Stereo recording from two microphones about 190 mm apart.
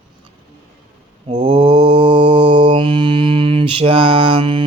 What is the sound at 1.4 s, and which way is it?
Mantra, 30° right (ahead or behind).